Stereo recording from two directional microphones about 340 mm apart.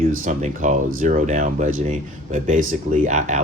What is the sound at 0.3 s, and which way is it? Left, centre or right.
Speech, right.